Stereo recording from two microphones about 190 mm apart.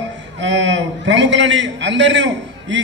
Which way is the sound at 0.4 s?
70° right (ahead or behind).